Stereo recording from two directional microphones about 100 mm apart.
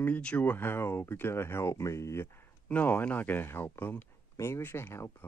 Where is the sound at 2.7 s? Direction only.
15° left (ahead or behind).